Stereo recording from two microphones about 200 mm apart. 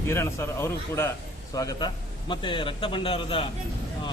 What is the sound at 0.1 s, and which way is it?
A man's voice, 15° left (ahead or behind).